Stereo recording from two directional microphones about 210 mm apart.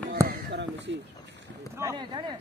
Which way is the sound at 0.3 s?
55° right (ahead or behind).